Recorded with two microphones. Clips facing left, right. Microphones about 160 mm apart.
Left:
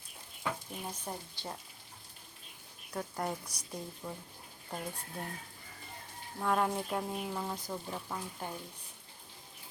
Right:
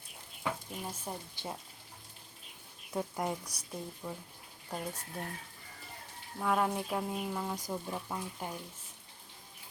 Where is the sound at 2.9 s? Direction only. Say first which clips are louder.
Right 2 dB; 15° right (ahead or behind).